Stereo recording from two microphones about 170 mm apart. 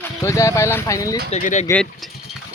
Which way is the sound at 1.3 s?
45° left (ahead or behind).